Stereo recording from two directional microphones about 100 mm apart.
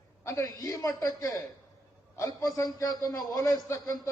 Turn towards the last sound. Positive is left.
turn(degrees=35)  # may be behind; listen again after turning